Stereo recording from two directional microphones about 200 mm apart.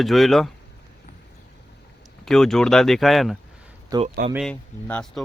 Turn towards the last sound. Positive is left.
turn(degrees=5)  # may be behind; listen again after turning